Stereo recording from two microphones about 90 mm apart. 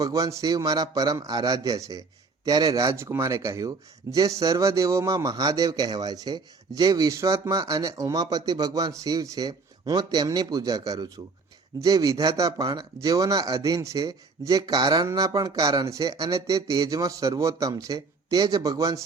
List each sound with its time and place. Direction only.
0.0 s a man's voice: 40° right (ahead or behind)